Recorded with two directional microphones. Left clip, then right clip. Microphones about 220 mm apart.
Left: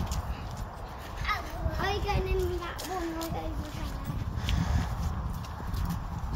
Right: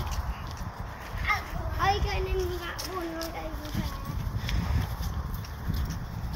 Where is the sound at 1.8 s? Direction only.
45° left (ahead or behind).